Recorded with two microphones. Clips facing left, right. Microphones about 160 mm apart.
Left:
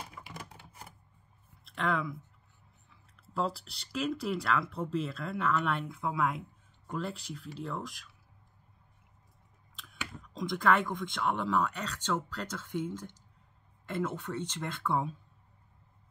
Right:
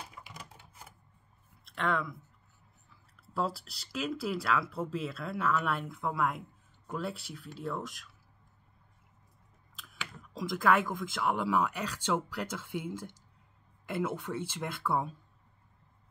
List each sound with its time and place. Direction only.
0.3 s typewriter: 55° left (ahead or behind)
1.6 s speech: centre (ahead or behind)
9.8 s speech: 5° right (ahead or behind)